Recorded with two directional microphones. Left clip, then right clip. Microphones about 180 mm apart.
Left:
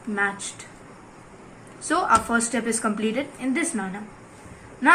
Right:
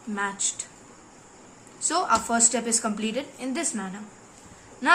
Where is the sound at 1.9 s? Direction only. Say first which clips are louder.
Left 3 dB; 35° right (ahead or behind).